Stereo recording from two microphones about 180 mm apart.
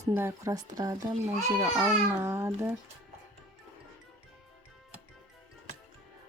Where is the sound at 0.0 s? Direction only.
15° right (ahead or behind).